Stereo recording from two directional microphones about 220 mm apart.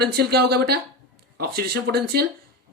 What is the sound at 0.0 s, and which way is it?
Speech, 45° right (ahead or behind).